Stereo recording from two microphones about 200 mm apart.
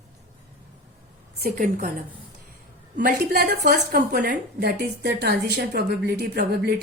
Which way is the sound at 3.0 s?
50° right (ahead or behind).